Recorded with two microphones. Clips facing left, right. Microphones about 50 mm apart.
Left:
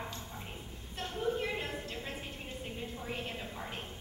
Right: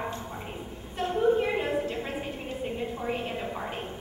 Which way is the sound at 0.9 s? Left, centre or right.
Right.